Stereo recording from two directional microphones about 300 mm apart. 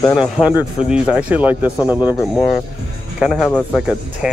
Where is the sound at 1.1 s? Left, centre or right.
Centre.